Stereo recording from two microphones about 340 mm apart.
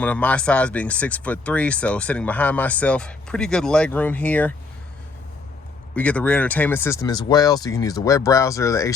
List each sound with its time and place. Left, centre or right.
0.0 s speech: centre
5.9 s speech: centre